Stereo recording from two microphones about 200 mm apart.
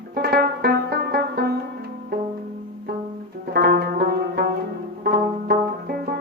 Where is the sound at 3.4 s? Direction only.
50° right (ahead or behind).